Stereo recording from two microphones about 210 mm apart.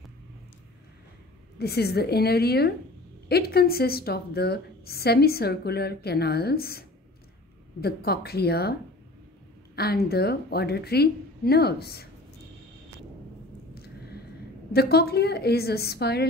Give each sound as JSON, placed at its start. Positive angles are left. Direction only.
{"t": 1.6, "sound": "a woman's voice", "side_deg": 50}
{"t": 9.8, "sound": "a woman's voice", "side_deg": 50}
{"t": 14.7, "sound": "a woman's voice", "side_deg": 50}